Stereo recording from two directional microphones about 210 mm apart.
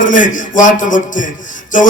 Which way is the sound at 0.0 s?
40° left (ahead or behind).